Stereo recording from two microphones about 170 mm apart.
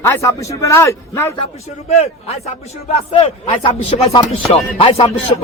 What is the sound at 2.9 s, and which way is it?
Speech, 35° left (ahead or behind).